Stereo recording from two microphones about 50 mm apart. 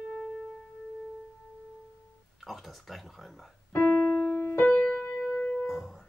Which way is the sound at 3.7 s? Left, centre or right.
Left.